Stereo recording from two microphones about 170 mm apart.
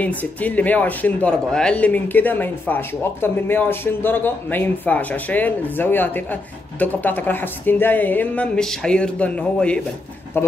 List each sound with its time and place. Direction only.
0.0 s speech: 10° left (ahead or behind)